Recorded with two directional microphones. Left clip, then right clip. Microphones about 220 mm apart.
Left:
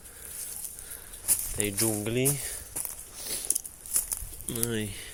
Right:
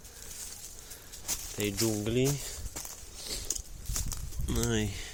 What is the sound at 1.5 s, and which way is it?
Speech, 10° right (ahead or behind).